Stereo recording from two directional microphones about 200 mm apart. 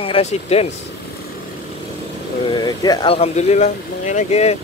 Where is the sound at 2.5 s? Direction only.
20° left (ahead or behind).